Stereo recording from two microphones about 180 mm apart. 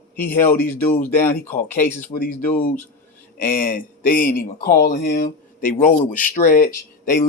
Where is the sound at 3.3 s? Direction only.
55° left (ahead or behind).